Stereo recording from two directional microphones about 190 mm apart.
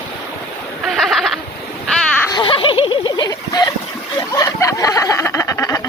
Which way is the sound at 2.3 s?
25° left (ahead or behind).